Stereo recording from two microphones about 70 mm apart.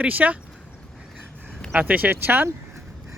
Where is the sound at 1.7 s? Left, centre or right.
Right.